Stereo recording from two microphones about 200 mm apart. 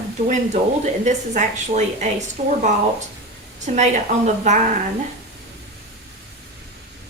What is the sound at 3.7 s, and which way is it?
Speech, 35° right (ahead or behind).